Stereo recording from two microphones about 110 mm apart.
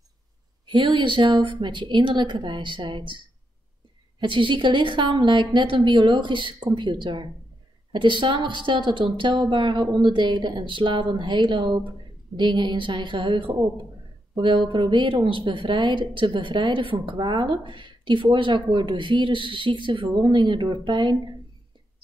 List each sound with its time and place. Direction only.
0.7 s speech: 45° right (ahead or behind)
4.2 s speech: 50° right (ahead or behind)